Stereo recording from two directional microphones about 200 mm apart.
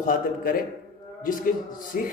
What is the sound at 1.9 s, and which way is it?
Speech, 40° left (ahead or behind).